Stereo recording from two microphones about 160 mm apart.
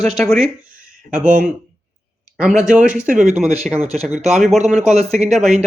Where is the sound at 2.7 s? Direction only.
10° right (ahead or behind).